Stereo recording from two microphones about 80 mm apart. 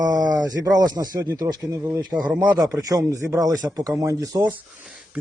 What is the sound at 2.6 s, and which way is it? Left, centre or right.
Speech, right.